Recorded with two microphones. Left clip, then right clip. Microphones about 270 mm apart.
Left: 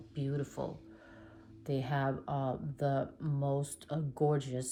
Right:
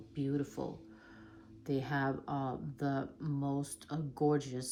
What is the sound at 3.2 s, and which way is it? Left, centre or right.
Speech, centre.